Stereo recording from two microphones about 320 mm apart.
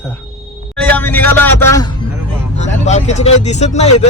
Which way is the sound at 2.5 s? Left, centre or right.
Left.